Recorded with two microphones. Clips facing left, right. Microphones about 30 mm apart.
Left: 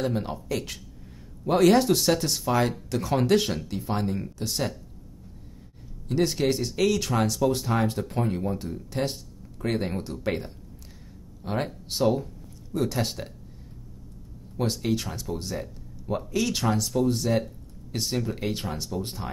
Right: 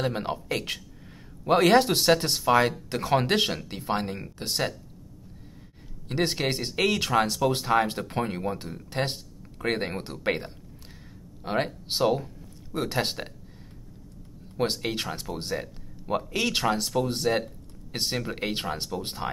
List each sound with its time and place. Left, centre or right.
0.0 s speech: right
6.0 s speech: right
8.9 s speech: right
12.0 s speech: right
14.6 s speech: right